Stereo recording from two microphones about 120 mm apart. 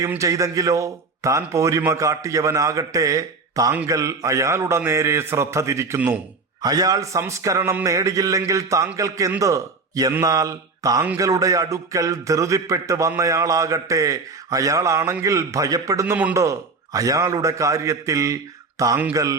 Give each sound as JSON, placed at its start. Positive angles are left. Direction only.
{"t": 0.2, "sound": "a man's voice", "side_deg": -25}